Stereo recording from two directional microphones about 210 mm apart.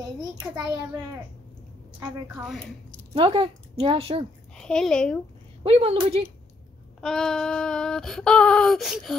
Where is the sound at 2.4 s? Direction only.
5° left (ahead or behind).